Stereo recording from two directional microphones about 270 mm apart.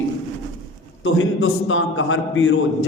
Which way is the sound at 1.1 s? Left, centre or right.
Left.